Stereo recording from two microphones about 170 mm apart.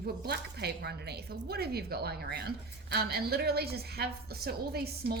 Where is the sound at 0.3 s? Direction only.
70° right (ahead or behind).